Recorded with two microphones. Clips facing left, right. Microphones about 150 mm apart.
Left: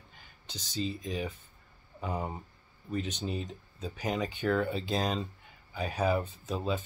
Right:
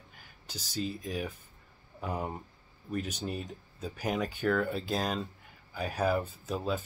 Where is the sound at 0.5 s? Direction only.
5° right (ahead or behind).